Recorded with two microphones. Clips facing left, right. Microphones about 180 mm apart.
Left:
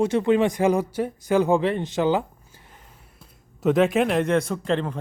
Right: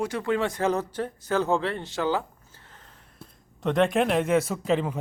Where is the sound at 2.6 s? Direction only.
10° left (ahead or behind).